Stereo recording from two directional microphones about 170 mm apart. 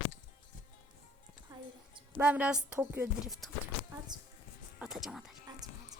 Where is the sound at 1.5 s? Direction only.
25° right (ahead or behind).